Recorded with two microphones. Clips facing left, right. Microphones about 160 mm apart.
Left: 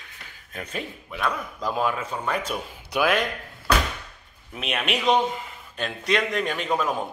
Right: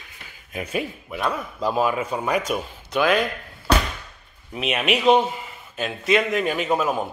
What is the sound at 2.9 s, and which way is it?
Speech, centre (ahead or behind).